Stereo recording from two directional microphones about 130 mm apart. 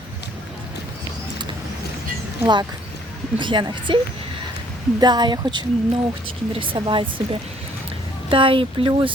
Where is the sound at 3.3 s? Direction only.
35° right (ahead or behind).